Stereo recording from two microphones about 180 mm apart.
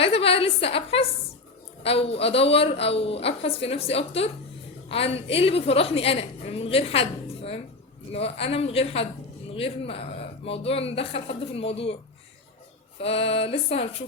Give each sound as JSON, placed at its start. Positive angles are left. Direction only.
{"t": 0.0, "sound": "a woman's voice", "side_deg": 30}
{"t": 13.0, "sound": "a woman's voice", "side_deg": 35}